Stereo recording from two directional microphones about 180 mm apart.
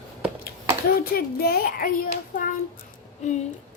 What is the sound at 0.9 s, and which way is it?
Speech, 55° left (ahead or behind).